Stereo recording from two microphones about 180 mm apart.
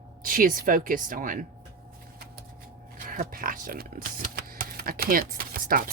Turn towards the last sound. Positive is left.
turn(degrees=-50)  # may be behind; listen again after turning